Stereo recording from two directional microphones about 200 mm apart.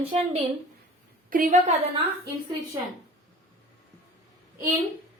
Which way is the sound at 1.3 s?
45° right (ahead or behind).